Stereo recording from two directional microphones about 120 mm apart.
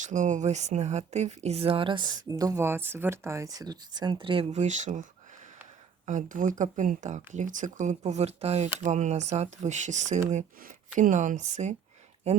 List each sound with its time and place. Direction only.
0.0 s speech: 90° right; by 2.6 s 30° right (ahead or behind)
2.6 s speech: 20° right (ahead or behind); by 4.4 s 45° right (ahead or behind)
4.5 s speech: 75° right (ahead or behind)
6.1 s speech: 90° right; by 8.7 s 60° right (ahead or behind)
8.8 s speech: 80° right